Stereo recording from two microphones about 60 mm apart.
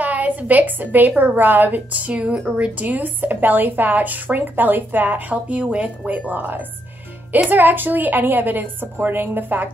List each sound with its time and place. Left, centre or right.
0.0 s a woman's voice: right